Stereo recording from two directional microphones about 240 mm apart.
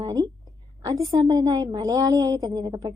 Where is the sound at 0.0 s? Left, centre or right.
Centre.